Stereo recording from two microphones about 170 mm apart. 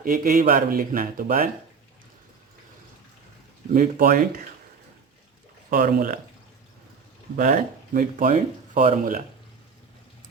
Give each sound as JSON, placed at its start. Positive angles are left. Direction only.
{"t": 0.0, "sound": "speech", "side_deg": -50}
{"t": 3.8, "sound": "speech", "side_deg": -55}
{"t": 5.7, "sound": "speech", "side_deg": -55}
{"t": 7.3, "sound": "speech", "side_deg": -50}